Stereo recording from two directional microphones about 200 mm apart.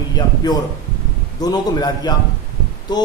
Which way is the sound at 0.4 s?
20° left (ahead or behind).